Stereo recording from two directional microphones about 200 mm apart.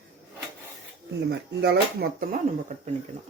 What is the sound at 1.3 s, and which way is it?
Speech, 55° right (ahead or behind).